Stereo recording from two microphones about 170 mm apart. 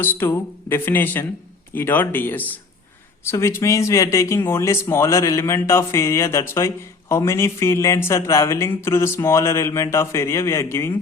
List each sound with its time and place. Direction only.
0.2 s speech: 15° left (ahead or behind)